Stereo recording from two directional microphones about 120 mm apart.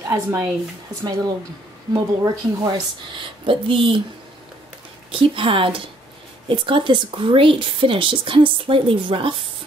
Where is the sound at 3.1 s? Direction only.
45° right (ahead or behind).